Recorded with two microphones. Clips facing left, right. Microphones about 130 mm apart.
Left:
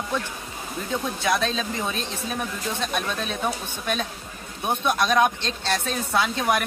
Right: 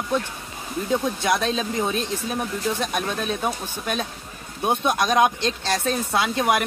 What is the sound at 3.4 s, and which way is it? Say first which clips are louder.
Speech: right 1 dB; 15° right (ahead or behind).